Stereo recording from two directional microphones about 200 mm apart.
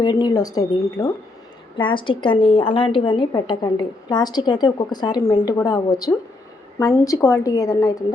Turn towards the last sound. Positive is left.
turn(degrees=15)  # may be behind; listen again after turning